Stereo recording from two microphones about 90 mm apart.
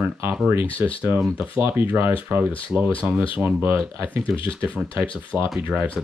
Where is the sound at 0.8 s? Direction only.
25° right (ahead or behind).